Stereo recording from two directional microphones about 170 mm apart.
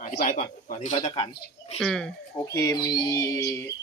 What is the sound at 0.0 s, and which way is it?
Speech, 50° left (ahead or behind).